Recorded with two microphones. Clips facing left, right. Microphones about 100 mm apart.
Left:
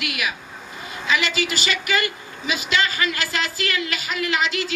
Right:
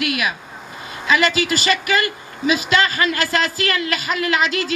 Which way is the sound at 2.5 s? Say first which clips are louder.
Right 4 dB; 40° right (ahead or behind).